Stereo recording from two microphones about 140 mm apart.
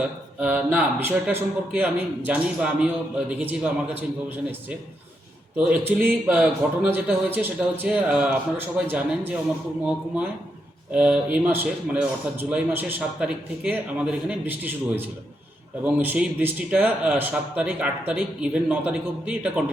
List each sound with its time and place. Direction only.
0.3 s speech: 10° right (ahead or behind)
5.5 s speech: 10° right (ahead or behind)
10.9 s speech: 5° right (ahead or behind)